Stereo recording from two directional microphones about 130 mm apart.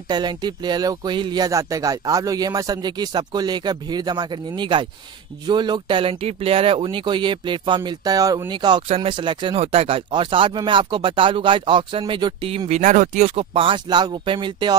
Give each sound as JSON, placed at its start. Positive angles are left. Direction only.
{"t": 0.1, "sound": "speech", "side_deg": -35}
{"t": 8.8, "sound": "speech", "side_deg": -45}